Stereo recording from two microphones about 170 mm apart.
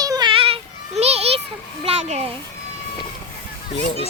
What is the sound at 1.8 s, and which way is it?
Children playing, 35° right (ahead or behind).